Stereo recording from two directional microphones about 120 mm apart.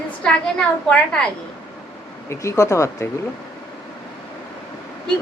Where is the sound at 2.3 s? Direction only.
25° left (ahead or behind).